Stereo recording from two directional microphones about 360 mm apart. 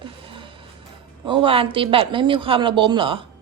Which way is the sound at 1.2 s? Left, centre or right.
Centre.